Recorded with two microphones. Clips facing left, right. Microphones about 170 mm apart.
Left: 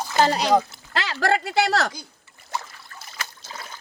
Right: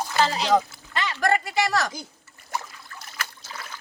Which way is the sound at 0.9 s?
85° left.